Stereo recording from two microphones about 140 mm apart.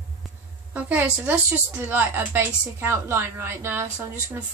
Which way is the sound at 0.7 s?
10° right (ahead or behind).